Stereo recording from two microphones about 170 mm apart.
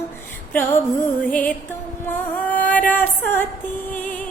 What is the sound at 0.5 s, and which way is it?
Female singing, 10° left (ahead or behind).